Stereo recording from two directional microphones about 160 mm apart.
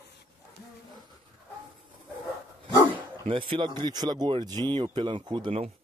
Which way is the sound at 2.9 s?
35° right (ahead or behind).